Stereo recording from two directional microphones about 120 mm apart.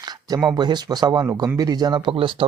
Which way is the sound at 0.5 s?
35° right (ahead or behind).